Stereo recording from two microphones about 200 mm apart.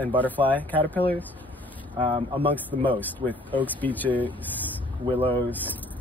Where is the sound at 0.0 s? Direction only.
10° left (ahead or behind).